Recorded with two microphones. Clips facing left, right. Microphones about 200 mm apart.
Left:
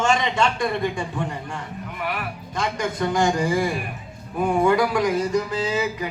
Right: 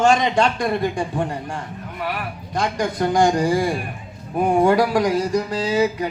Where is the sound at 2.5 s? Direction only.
35° right (ahead or behind).